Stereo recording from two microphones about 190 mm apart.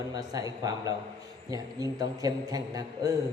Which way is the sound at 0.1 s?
20° right (ahead or behind).